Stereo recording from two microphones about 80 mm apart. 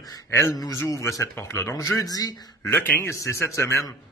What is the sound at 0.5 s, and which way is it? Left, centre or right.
Speech, left.